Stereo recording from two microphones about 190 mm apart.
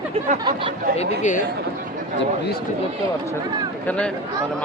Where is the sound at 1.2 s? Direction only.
40° left (ahead or behind).